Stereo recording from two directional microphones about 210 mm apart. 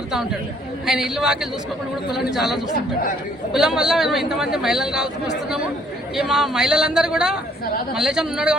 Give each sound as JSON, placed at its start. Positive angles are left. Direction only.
{"t": 0.9, "sound": "a man's voice", "side_deg": 0}
{"t": 6.1, "sound": "a man's voice", "side_deg": 0}